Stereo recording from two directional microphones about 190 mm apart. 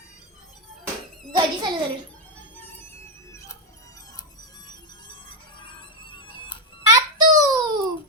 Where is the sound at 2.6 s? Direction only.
10° left (ahead or behind); by 6.6 s 25° left (ahead or behind).